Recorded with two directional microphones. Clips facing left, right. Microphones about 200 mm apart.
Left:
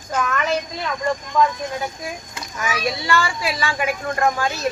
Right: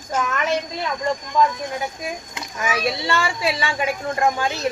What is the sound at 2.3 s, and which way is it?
Speech, 25° right (ahead or behind).